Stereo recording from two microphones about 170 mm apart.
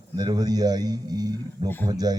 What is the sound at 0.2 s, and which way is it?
A man's voice, 25° right (ahead or behind).